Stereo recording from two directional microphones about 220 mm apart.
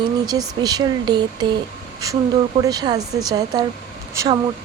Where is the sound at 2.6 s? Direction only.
20° right (ahead or behind).